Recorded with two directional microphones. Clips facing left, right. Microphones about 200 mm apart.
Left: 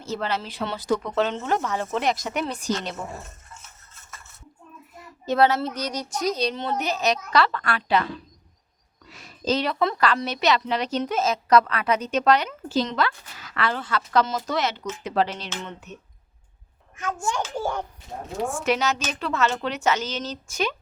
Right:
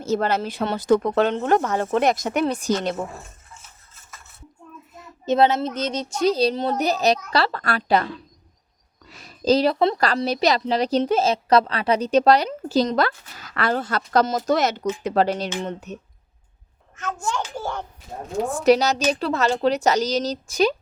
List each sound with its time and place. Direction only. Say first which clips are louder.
0.0 s speech: right 6 dB; 45° right (ahead or behind)
5.2 s a woman's voice: right 2 dB; 20° right (ahead or behind); by 8.0 s 40° right (ahead or behind)
9.0 s a woman's voice: right 6 dB; 35° right (ahead or behind)
17.5 s a child's voice: left 2 dB; 15° left (ahead or behind)
18.4 s a woman's voice: right 7 dB; 35° right (ahead or behind)